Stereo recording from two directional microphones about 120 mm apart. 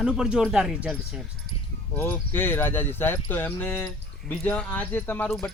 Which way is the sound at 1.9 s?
20° left (ahead or behind).